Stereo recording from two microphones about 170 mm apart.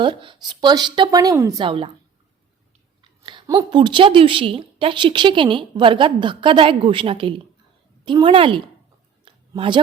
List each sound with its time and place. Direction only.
0.0 s a woman's voice: 30° right (ahead or behind)
3.0 s a woman's voice: 30° right (ahead or behind)
9.2 s a sound: 30° right (ahead or behind)